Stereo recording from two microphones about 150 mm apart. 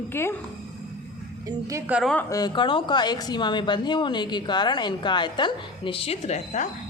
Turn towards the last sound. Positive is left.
turn(degrees=50)  # may be behind; listen again after turning